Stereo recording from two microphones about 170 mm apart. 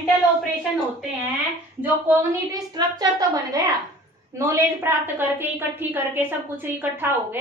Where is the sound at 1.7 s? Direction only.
15° right (ahead or behind).